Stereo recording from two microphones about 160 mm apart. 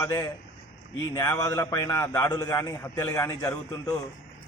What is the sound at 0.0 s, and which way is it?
A man's voice, 20° left (ahead or behind).